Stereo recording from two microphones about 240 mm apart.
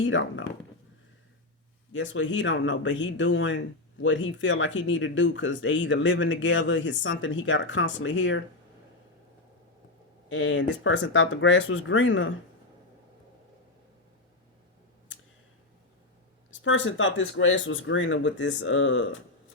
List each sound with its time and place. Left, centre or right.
0.0 s speech: left
1.9 s speech: left
10.2 s speech: left
16.6 s speech: left